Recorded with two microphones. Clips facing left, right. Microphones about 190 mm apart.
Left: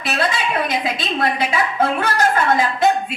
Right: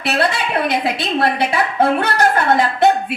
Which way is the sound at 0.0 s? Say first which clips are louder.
Right 3 dB; 60° right (ahead or behind).